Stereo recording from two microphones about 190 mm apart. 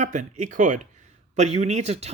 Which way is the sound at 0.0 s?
40° right (ahead or behind).